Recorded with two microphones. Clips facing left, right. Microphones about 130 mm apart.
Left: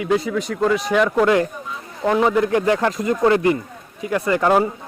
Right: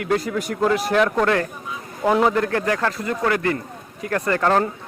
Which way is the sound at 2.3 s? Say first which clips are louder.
Left 4 dB; 15° left (ahead or behind).